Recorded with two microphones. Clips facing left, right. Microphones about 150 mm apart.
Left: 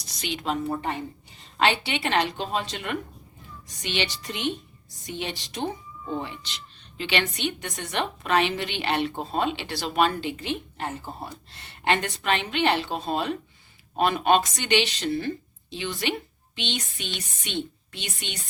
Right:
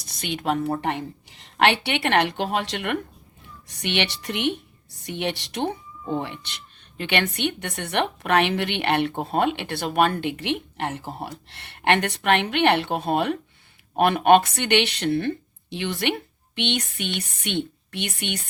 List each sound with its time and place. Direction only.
0.0 s a woman's voice: 55° right (ahead or behind)